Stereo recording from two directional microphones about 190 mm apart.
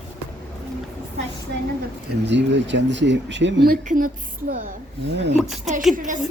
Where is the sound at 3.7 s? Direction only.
45° right (ahead or behind).